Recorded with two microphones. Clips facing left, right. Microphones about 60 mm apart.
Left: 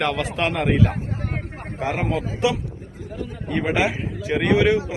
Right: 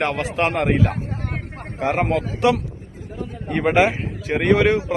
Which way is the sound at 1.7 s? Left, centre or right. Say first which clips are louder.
Right 4 dB; right.